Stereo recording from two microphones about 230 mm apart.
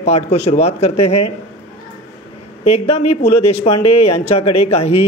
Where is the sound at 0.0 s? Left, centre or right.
Left.